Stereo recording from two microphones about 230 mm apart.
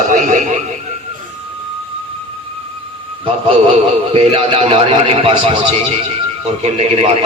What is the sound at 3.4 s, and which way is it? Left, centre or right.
Speech, right.